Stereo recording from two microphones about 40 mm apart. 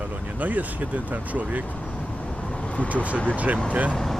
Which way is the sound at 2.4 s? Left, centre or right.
Left.